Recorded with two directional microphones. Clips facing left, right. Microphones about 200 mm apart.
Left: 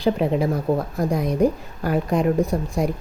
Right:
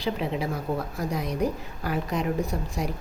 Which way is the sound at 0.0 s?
45° left (ahead or behind).